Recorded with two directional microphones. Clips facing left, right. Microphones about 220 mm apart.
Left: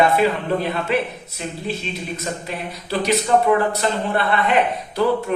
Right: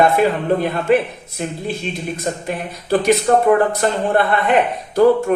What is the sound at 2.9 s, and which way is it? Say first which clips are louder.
Speech: right 4 dB; 50° right (ahead or behind).